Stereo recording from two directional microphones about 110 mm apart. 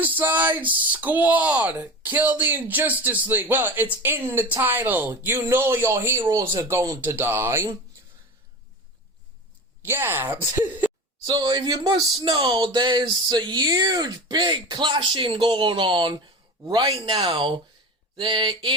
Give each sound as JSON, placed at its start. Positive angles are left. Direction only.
{"t": 0.0, "sound": "speech", "side_deg": -15}
{"t": 9.8, "sound": "speech", "side_deg": -20}
{"t": 11.3, "sound": "a man's voice", "side_deg": -40}